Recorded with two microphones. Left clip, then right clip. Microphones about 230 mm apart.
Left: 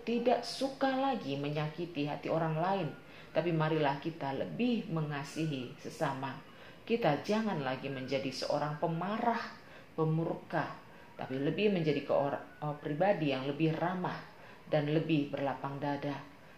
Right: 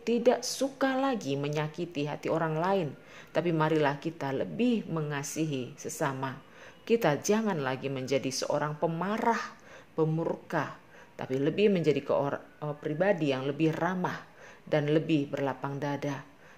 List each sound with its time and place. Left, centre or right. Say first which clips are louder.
0.0 s speech: right 5 dB; right
11.1 s speech: right 6 dB; right